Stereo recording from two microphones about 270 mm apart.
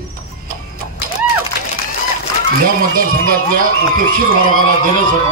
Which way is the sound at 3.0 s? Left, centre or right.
Right.